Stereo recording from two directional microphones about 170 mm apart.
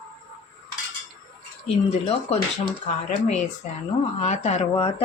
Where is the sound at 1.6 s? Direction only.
35° left (ahead or behind).